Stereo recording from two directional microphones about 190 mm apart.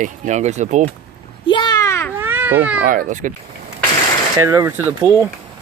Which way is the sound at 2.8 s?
45° right (ahead or behind).